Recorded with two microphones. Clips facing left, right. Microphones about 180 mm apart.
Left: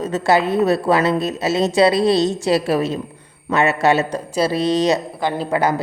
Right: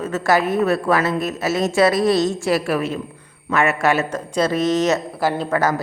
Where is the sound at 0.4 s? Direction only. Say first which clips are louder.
Left 2 dB; 35° left (ahead or behind).